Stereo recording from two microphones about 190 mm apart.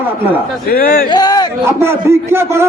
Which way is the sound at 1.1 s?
20° left (ahead or behind).